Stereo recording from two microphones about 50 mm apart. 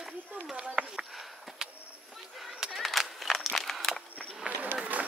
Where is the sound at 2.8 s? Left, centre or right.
Centre.